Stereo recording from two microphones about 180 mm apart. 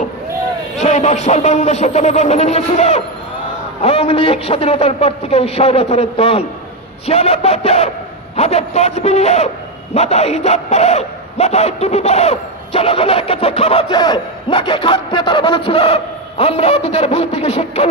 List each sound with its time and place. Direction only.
0.7 s speech: 40° left (ahead or behind)